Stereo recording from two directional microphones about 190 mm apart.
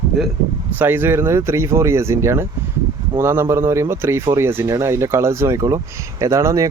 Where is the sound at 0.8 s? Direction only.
10° right (ahead or behind).